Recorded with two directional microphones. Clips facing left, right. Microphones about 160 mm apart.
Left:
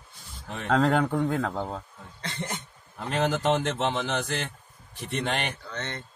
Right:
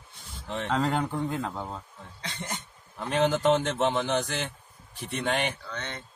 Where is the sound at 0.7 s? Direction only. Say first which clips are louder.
Left 5 dB; 90° left.